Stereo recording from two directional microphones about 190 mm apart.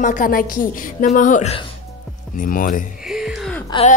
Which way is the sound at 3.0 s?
Centre (ahead or behind).